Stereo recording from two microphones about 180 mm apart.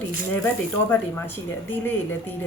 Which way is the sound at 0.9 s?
10° left (ahead or behind).